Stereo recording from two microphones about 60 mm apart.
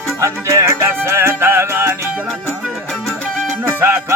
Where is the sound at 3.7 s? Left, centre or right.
Right.